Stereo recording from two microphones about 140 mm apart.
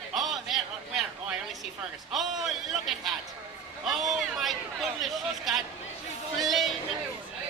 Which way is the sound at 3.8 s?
Centre (ahead or behind).